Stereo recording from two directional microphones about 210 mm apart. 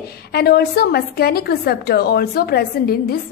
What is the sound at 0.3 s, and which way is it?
A woman's voice, 50° left (ahead or behind).